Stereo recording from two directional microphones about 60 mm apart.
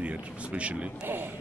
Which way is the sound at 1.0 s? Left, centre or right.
Right.